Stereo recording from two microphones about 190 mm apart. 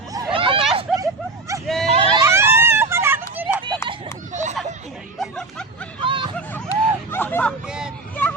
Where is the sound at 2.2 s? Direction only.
15° right (ahead or behind).